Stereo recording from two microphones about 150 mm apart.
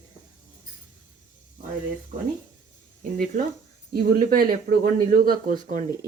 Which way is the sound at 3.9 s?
65° right (ahead or behind).